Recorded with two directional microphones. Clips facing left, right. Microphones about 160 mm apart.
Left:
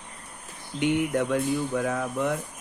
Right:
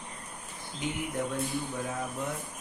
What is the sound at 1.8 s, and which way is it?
Speech, 90° left.